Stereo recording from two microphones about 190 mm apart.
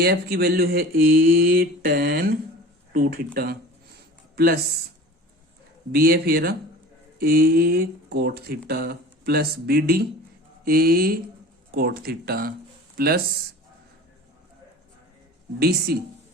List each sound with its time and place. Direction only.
0.0 s speech: 55° right (ahead or behind)
5.9 s speech: 55° right (ahead or behind)
15.5 s speech: 55° right (ahead or behind)